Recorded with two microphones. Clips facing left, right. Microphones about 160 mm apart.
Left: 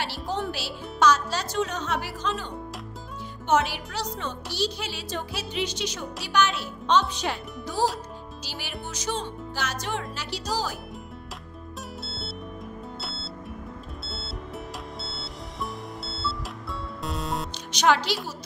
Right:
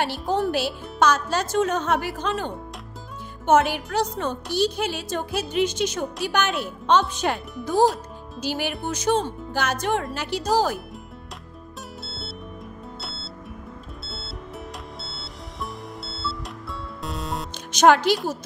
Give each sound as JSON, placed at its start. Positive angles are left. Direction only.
{"t": 0.0, "sound": "speech", "side_deg": -50}
{"t": 13.0, "sound": "music", "side_deg": 0}
{"t": 17.7, "sound": "speech", "side_deg": -50}